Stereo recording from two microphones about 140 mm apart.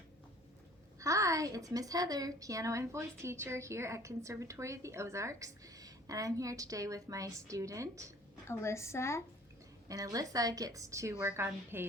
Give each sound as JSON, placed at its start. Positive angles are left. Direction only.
{"t": 0.9, "sound": "a woman's voice", "side_deg": -20}
{"t": 8.4, "sound": "a woman's voice", "side_deg": 20}
{"t": 9.9, "sound": "a woman's voice", "side_deg": -25}